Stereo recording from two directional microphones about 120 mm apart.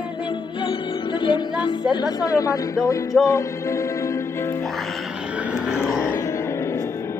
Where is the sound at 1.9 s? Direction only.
35° left (ahead or behind).